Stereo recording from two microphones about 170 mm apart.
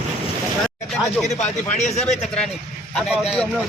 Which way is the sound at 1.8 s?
45° left (ahead or behind).